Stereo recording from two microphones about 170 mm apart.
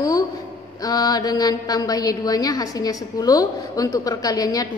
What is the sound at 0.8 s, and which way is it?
A woman's voice, 20° left (ahead or behind).